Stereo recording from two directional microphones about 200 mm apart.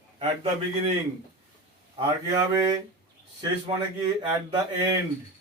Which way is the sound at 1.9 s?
20° right (ahead or behind).